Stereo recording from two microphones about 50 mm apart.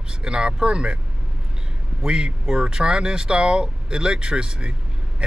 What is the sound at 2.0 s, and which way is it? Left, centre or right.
Speech, centre.